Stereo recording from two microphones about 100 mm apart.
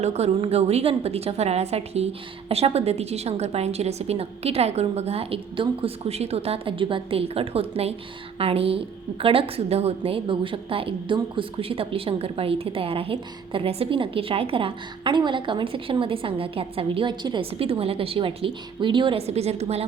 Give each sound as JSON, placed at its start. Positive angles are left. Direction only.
{"t": 0.1, "sound": "a woman's voice", "side_deg": -90}
{"t": 17.4, "sound": "a woman's voice", "side_deg": -70}